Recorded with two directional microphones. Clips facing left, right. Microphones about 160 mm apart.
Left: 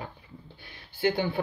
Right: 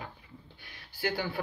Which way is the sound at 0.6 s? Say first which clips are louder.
Left 7 dB; 25° left (ahead or behind).